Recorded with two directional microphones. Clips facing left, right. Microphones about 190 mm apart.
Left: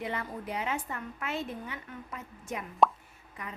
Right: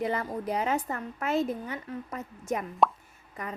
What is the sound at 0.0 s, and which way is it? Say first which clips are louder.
A woman's voice: right 6 dB; 40° right (ahead or behind).